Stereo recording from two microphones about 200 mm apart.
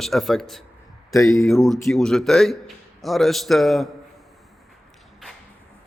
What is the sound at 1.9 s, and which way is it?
A man's voice, centre (ahead or behind).